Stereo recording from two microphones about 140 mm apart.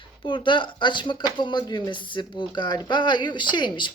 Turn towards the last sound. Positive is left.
turn(degrees=35)  # may be behind; listen again after turning